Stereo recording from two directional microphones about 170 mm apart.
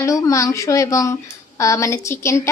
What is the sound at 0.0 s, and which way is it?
A woman's voice, 20° left (ahead or behind).